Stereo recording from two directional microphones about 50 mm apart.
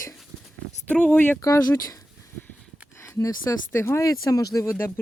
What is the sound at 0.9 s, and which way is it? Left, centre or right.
Speech, left.